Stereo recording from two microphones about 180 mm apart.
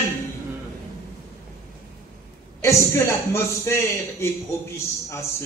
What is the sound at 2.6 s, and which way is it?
Speech, 15° left (ahead or behind).